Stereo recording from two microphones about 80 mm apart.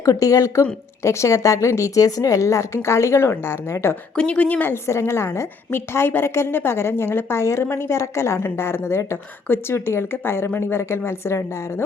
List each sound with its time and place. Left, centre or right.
0.0 s a woman's voice: left
4.1 s speech: centre
4.7 s a woman's voice: left